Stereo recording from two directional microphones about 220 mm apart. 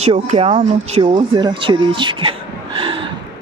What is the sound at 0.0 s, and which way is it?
Speech, 30° right (ahead or behind).